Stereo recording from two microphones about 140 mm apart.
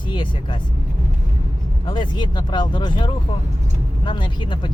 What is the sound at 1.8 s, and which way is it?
Speech, 35° left (ahead or behind).